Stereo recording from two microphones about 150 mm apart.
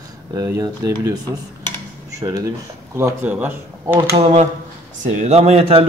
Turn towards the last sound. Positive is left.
turn(degrees=-40)  # may be behind; listen again after turning